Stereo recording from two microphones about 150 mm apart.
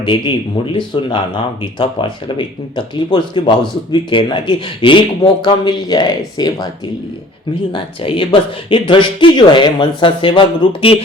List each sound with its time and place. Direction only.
0.0 s speech: 35° left (ahead or behind)
7.7 s speech: 35° left (ahead or behind)